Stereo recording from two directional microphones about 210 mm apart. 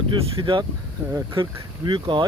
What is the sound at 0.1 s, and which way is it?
Speech, 25° right (ahead or behind).